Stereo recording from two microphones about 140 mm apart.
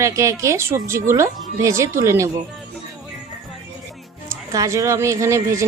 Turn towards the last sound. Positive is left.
turn(degrees=-20)  # may be behind; listen again after turning